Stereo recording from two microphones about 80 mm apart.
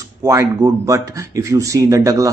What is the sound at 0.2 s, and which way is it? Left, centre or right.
Speech, right.